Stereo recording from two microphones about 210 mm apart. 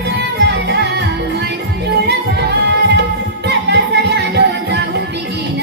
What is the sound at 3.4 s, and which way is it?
Music, 55° right (ahead or behind).